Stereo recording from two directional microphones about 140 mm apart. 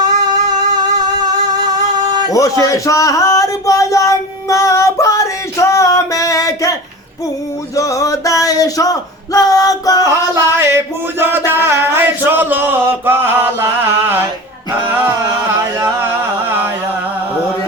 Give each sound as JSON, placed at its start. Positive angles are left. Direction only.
{"t": 0.9, "sound": "music", "side_deg": -30}
{"t": 2.3, "sound": "speech", "side_deg": 25}
{"t": 7.8, "sound": "music", "side_deg": 25}
{"t": 10.1, "sound": "music", "side_deg": -20}
{"t": 11.2, "sound": "a sound", "side_deg": -15}
{"t": 14.8, "sound": "music", "side_deg": -15}